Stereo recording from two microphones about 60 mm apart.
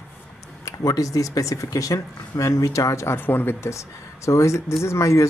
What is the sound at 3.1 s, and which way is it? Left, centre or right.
Speech, left.